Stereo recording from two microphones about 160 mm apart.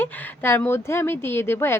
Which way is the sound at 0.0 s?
10° left (ahead or behind).